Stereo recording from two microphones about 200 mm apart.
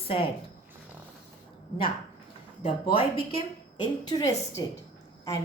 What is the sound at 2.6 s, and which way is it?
Speech, 25° left (ahead or behind).